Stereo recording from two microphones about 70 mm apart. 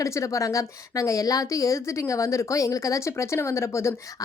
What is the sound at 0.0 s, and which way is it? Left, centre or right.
A woman's voice, left.